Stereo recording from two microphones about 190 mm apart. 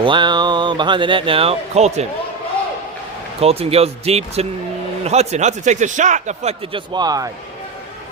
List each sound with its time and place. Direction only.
0.0 s speech: 25° right (ahead or behind)
3.4 s a man's voice: 30° right (ahead or behind)